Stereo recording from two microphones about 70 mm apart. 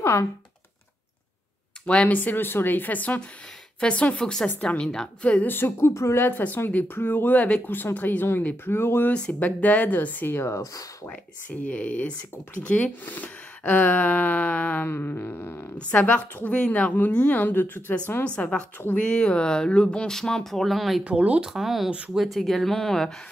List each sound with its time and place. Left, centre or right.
0.0 s speech: left
1.9 s speech: centre
2.1 s speech: left
5.5 s speech: left
6.1 s speech: left
7.3 s speech: centre
7.6 s speech: left
9.1 s speech: centre
10.5 s speech: left
11.1 s speech: left
15.9 s speech: left
18.2 s speech: centre
21.0 s speech: centre
21.5 s speech: centre